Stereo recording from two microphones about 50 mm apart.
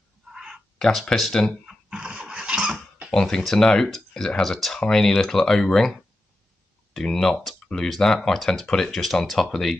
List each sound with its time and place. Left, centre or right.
0.3 s a sound: centre
0.7 s speech: centre
1.7 s dog: centre
3.1 s speech: centre